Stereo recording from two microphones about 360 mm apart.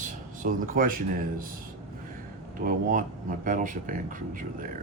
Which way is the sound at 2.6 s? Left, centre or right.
Right.